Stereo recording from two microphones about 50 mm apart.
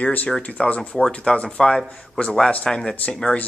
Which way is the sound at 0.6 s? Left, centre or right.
Left.